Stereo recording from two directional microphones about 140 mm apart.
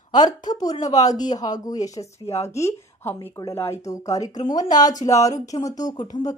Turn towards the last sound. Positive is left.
turn(degrees=25)  # may be behind; listen again after turning